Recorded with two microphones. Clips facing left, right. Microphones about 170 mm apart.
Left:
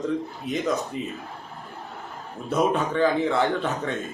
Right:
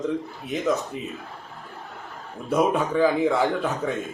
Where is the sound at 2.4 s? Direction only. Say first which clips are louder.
Right 1 dB; 10° right (ahead or behind).